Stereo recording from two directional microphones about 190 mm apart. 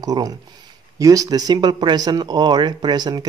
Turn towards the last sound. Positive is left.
turn(degrees=-20)  # may be behind; listen again after turning